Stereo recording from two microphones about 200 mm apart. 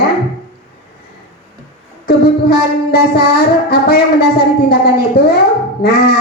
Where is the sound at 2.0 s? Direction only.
50° left (ahead or behind).